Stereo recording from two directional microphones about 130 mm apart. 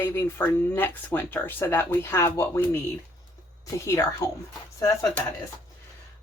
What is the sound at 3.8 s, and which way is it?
Speech, 20° left (ahead or behind).